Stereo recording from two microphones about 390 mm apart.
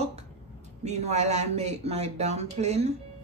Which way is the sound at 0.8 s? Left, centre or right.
Centre.